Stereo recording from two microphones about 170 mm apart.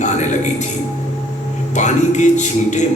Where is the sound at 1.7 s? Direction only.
45° left (ahead or behind).